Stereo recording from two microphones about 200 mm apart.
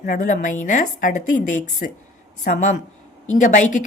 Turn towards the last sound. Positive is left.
turn(degrees=40)  # may be behind; listen again after turning